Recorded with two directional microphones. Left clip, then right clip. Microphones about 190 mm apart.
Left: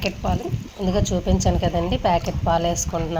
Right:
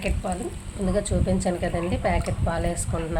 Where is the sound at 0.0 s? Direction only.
10° left (ahead or behind).